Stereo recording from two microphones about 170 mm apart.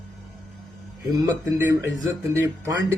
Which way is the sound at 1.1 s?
20° right (ahead or behind).